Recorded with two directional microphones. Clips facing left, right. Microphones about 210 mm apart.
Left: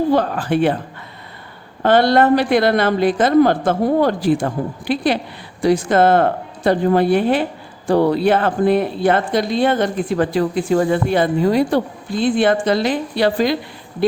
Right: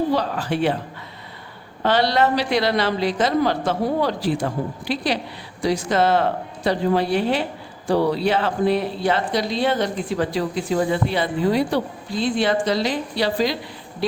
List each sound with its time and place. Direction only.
0.1 s speech: 50° left (ahead or behind)
1.8 s speech: 50° left (ahead or behind)